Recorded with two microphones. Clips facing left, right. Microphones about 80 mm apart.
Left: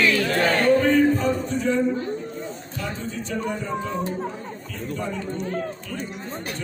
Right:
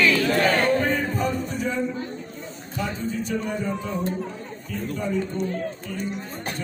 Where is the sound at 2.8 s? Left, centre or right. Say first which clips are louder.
Right 3 dB; centre.